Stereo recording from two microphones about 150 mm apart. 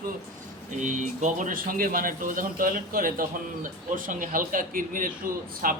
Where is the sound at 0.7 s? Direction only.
55° right (ahead or behind).